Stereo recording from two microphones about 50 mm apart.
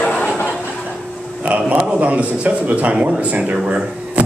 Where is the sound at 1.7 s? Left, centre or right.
Right.